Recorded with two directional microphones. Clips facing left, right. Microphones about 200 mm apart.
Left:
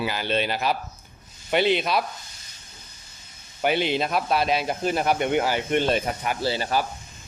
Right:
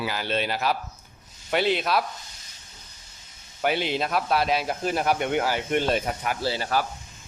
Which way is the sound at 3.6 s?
Centre (ahead or behind).